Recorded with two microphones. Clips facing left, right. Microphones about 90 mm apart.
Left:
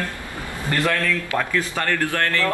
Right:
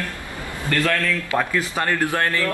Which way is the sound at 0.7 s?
20° left (ahead or behind).